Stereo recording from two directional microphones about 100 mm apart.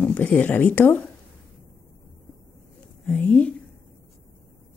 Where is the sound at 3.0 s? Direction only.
15° left (ahead or behind).